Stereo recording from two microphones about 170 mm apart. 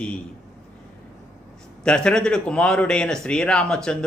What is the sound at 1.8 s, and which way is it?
A man's voice, 5° left (ahead or behind).